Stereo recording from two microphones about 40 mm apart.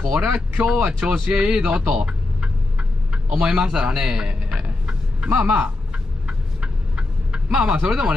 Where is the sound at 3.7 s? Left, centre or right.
Right.